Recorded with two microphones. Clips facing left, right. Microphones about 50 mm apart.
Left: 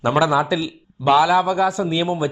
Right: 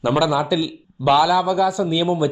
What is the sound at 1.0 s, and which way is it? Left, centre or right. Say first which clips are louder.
Speech: left 1 dB; left.